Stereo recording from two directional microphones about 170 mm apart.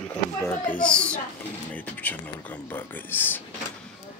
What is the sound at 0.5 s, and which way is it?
Speech, 10° left (ahead or behind).